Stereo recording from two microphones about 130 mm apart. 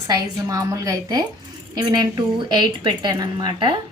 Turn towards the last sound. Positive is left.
turn(degrees=-35)  # may be behind; listen again after turning